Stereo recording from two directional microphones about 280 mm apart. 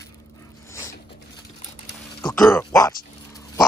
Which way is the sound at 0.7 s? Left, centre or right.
Centre.